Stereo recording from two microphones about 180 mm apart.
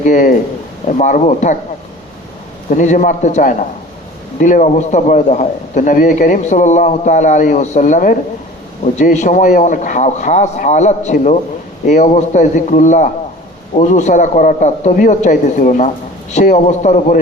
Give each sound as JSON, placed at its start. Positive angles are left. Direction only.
{"t": 0.0, "sound": "a man's voice", "side_deg": 45}
{"t": 2.6, "sound": "a man's voice", "side_deg": 45}